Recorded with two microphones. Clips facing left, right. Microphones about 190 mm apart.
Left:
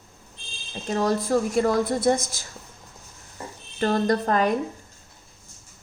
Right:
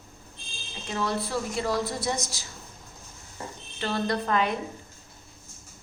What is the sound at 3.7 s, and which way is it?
Speech, 45° left (ahead or behind).